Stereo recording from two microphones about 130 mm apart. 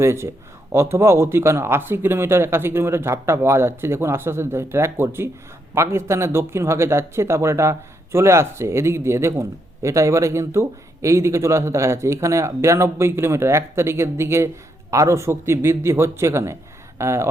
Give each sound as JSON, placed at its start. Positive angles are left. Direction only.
{"t": 0.0, "sound": "speech", "side_deg": -20}